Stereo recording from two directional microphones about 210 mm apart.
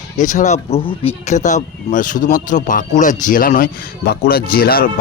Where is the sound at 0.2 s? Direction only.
35° left (ahead or behind).